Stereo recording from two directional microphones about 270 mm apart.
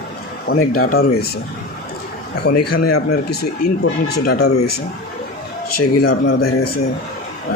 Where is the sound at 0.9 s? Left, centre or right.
Left.